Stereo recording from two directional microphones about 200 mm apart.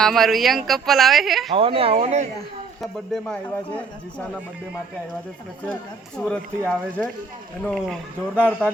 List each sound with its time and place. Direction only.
0.0 s speech: centre (ahead or behind)
1.5 s speech: 25° right (ahead or behind)
2.8 s speech: 5° left (ahead or behind)
6.1 s speech: 5° left (ahead or behind)